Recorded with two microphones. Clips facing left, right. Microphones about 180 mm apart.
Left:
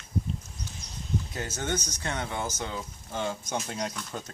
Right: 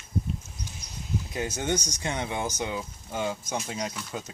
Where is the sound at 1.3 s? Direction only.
15° right (ahead or behind).